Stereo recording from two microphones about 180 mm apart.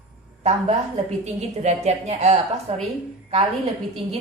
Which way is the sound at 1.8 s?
40° right (ahead or behind).